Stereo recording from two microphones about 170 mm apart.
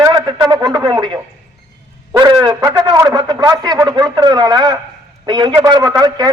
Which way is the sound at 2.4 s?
20° right (ahead or behind).